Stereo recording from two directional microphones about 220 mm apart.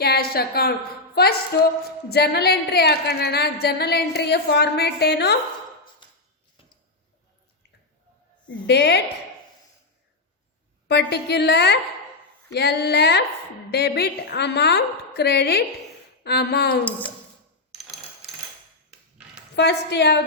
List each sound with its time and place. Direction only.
0.0 s a woman's voice: 45° left (ahead or behind)
6.0 s a sound: 20° left (ahead or behind)
8.6 s a woman's voice: 50° left (ahead or behind)
10.8 s a woman's voice: 50° left (ahead or behind)
19.5 s a woman's voice: 50° left (ahead or behind)